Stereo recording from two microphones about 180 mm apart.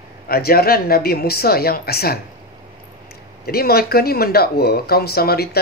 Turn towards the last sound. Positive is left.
turn(degrees=60)  # may be behind; listen again after turning